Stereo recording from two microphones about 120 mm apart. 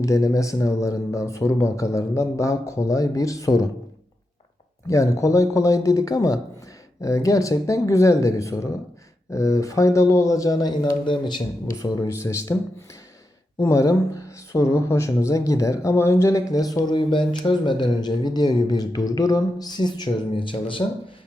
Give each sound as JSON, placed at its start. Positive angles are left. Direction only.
{"t": 0.0, "sound": "speech", "side_deg": 25}
{"t": 4.9, "sound": "speech", "side_deg": 25}
{"t": 11.7, "sound": "speech", "side_deg": 25}
{"t": 13.6, "sound": "speech", "side_deg": 25}